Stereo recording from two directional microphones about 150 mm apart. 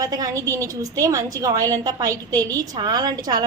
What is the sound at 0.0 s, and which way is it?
A woman's voice, 25° right (ahead or behind).